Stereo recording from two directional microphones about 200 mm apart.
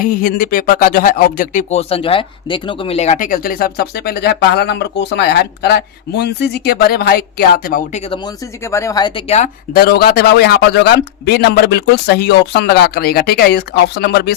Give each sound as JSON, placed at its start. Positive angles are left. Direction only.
{"t": 0.0, "sound": "speech", "side_deg": 45}
{"t": 7.9, "sound": "speech", "side_deg": 30}
{"t": 9.7, "sound": "speech", "side_deg": 50}